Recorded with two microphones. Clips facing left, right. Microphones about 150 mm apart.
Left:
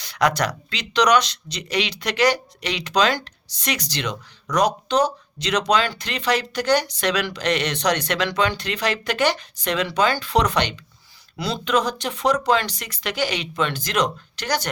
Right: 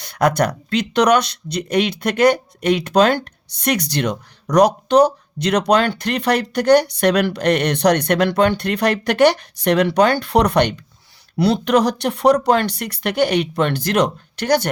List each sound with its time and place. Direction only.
0.0 s speech: 50° right (ahead or behind)